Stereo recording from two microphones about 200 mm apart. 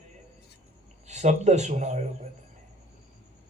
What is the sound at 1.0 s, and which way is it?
A man's voice, 35° right (ahead or behind).